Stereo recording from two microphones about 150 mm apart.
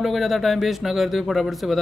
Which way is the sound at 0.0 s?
Centre (ahead or behind).